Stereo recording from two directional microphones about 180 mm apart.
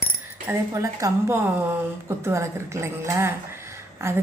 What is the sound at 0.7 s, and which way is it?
A woman's voice, 20° right (ahead or behind).